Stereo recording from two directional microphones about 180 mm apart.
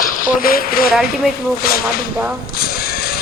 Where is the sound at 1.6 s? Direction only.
55° left (ahead or behind).